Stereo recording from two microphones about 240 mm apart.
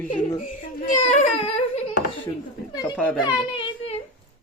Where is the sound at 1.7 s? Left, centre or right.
Left.